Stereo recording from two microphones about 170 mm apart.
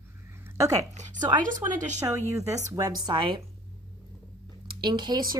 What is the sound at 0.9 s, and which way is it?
Speech, 45° right (ahead or behind).